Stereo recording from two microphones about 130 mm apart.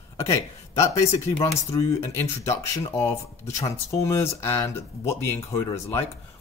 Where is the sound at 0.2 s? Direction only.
20° left (ahead or behind).